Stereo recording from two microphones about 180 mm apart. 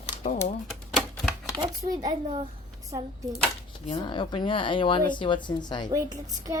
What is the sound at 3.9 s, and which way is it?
Speech, 25° left (ahead or behind).